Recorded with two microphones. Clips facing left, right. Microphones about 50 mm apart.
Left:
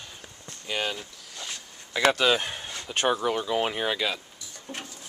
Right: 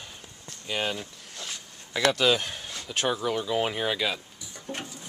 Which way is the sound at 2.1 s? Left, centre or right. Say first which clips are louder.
Even; centre.